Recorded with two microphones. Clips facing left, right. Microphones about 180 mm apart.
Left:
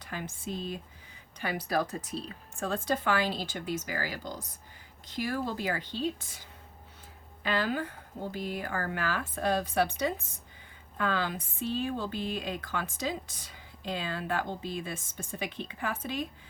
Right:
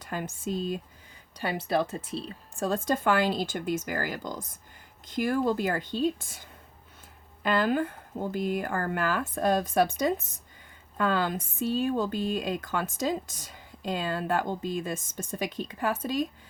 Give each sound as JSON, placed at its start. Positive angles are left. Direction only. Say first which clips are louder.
{"t": 0.0, "sound": "speech", "louder": "right 5 dB", "side_deg": -45}
{"t": 1.4, "sound": "speech", "louder": "right 3 dB", "side_deg": -25}